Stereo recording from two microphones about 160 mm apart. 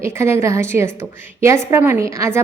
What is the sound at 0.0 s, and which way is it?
A woman's voice, 15° right (ahead or behind).